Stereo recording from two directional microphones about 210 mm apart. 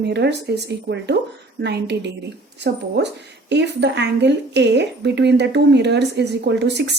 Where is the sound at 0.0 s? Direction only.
55° right (ahead or behind).